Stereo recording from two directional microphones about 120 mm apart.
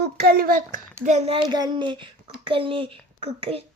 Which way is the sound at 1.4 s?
35° right (ahead or behind).